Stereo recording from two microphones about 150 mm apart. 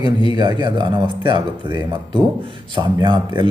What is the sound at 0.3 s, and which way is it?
A man's voice, 30° right (ahead or behind).